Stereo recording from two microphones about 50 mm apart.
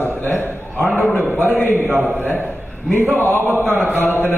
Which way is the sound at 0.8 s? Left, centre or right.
Right.